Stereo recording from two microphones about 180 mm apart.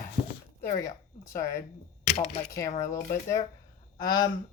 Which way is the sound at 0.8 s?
15° left (ahead or behind).